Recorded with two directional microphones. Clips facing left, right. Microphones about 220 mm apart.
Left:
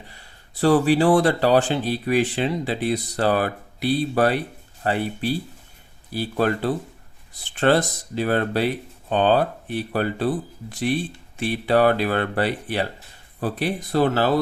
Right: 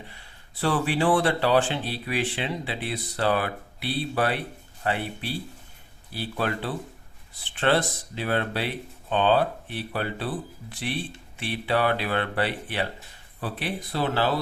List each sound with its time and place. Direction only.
0.6 s speech: 40° left (ahead or behind)